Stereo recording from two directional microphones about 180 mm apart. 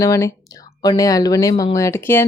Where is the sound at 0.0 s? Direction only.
15° left (ahead or behind).